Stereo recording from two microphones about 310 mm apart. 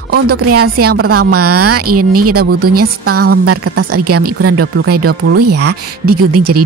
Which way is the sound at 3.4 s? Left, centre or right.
Right.